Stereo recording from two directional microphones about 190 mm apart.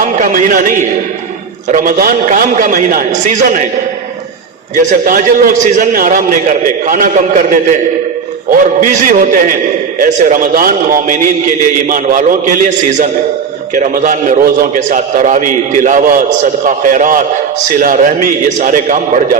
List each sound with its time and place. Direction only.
0.2 s a man's voice: 45° right (ahead or behind)
4.8 s a man's voice: 45° right (ahead or behind)
13.7 s a man's voice: 40° right (ahead or behind)